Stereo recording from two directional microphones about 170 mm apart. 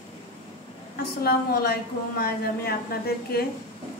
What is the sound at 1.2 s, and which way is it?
A woman's voice, 65° left (ahead or behind).